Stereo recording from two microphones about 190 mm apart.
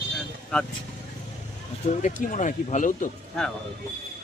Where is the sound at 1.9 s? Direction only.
40° left (ahead or behind).